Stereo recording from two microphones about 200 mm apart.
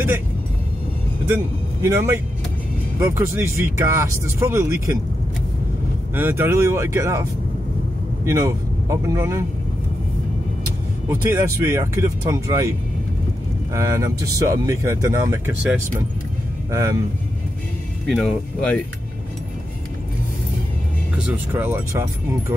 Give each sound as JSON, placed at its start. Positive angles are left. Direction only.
{"t": 1.8, "sound": "speech", "side_deg": -15}
{"t": 6.1, "sound": "speech", "side_deg": -10}
{"t": 8.3, "sound": "speech", "side_deg": -15}
{"t": 11.6, "sound": "speech", "side_deg": -15}
{"t": 13.7, "sound": "speech", "side_deg": -15}
{"t": 18.0, "sound": "speech", "side_deg": 0}
{"t": 21.2, "sound": "speech", "side_deg": -10}